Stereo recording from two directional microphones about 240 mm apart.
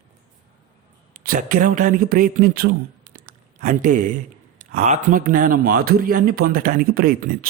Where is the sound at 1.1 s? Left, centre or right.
Right.